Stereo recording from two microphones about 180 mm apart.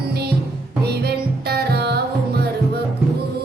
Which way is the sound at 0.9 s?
65° right (ahead or behind).